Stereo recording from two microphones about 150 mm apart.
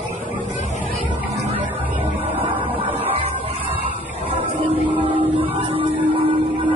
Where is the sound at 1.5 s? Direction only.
10° right (ahead or behind).